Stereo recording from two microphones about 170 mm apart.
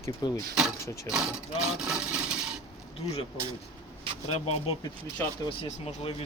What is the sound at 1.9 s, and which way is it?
Wood, 5° right (ahead or behind).